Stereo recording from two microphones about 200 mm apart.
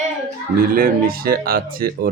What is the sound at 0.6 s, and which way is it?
A man's voice, 45° right (ahead or behind).